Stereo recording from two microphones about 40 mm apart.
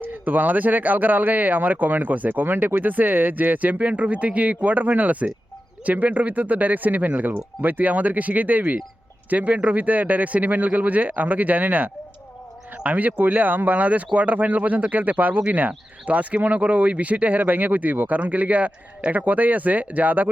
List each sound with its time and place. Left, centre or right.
0.0 s speech: right
2.3 s speech: right